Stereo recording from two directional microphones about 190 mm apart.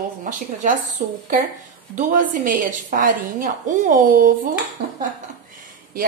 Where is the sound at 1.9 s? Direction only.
40° right (ahead or behind).